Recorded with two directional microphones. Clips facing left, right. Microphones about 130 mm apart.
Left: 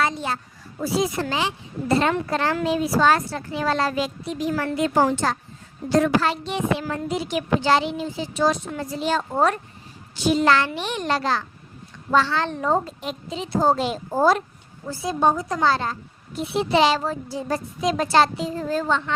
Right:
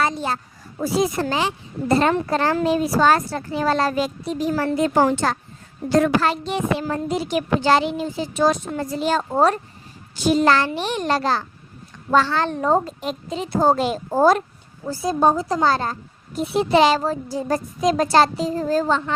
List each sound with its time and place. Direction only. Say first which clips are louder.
0.0 s a sound: right 2 dB; 40° right (ahead or behind)
0.8 s a woman's voice: right 2 dB; 45° right (ahead or behind)
4.9 s a woman's voice: even; 60° right (ahead or behind)
9.3 s a woman's voice: right 3 dB; 35° right (ahead or behind)
10.2 s a woman's voice: right 2 dB; 45° right (ahead or behind)
15.6 s a woman's voice: left 1 dB; 40° right (ahead or behind)